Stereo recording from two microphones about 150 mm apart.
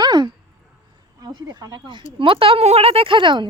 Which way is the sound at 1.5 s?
25° right (ahead or behind).